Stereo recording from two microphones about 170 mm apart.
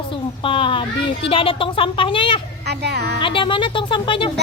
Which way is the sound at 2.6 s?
75° right (ahead or behind).